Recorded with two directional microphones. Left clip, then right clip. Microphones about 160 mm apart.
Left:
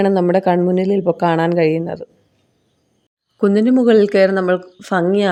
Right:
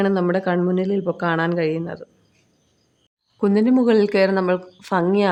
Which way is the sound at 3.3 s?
25° left (ahead or behind).